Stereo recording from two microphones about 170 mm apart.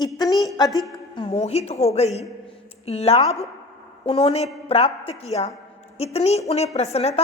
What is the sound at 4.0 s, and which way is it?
A woman's voice, 35° left (ahead or behind).